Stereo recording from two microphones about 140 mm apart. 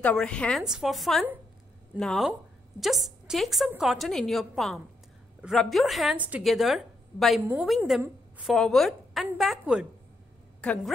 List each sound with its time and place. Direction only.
0.0 s a woman's voice: 5° left (ahead or behind)
6.1 s a woman's voice: 10° right (ahead or behind)
6.4 s a woman's voice: centre (ahead or behind)
10.6 s a woman's voice: 10° left (ahead or behind)